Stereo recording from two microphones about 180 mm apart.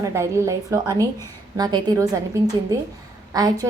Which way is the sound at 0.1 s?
15° right (ahead or behind).